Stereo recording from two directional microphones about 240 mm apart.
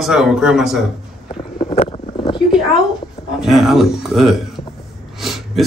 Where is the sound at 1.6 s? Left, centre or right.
Left.